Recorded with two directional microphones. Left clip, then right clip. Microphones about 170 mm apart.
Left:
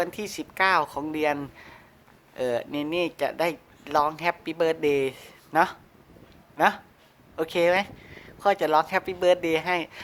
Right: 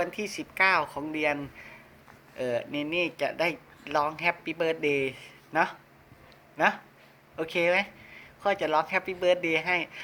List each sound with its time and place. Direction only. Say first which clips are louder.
0.0 s speech: left 2 dB; 35° left (ahead or behind)